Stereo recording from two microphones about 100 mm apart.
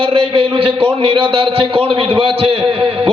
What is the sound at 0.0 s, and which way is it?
A man's voice, 65° right (ahead or behind).